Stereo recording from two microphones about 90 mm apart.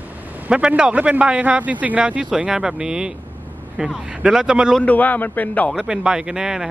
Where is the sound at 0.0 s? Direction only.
15° right (ahead or behind).